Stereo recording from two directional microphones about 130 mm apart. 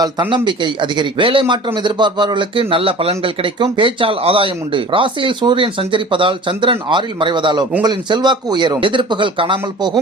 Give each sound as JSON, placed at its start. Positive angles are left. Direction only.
{"t": 0.0, "sound": "speech", "side_deg": -40}